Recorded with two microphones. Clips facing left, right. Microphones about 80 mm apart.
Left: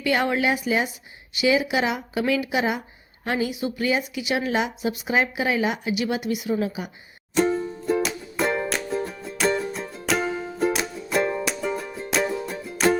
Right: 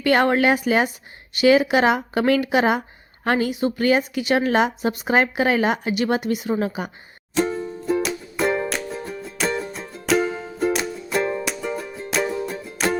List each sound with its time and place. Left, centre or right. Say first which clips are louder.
0.0 s speech: right 5 dB; right
7.3 s music: left 1 dB; centre